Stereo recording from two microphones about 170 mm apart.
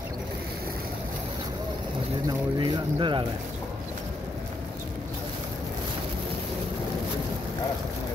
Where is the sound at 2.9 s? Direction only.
30° right (ahead or behind).